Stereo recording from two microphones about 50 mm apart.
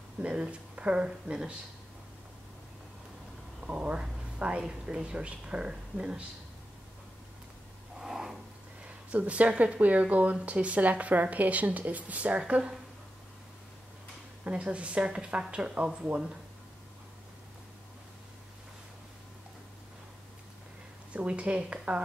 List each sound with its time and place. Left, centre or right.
0.2 s speech: right
3.6 s speech: right
8.0 s a sound: centre
8.8 s a sound: right
9.6 s speech: right
14.4 s speech: right
21.1 s speech: right